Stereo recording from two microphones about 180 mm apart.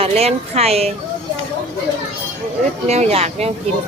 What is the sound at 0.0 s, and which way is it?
Speech, 35° right (ahead or behind).